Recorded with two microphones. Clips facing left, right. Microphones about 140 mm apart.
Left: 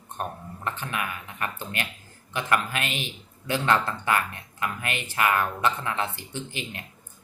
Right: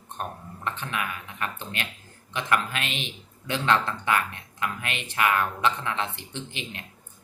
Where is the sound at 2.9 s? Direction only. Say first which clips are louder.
Left 1 dB; 5° left (ahead or behind).